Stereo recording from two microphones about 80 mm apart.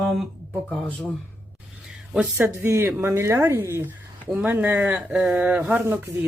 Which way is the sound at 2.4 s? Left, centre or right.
Right.